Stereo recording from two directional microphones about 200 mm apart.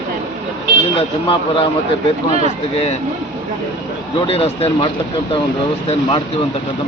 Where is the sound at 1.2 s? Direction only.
25° left (ahead or behind).